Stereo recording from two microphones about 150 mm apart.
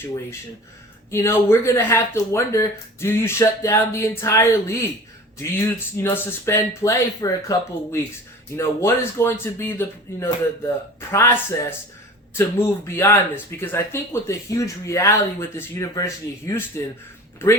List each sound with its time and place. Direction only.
0.0 s speech: 20° left (ahead or behind)
8.5 s speech: 20° left (ahead or behind)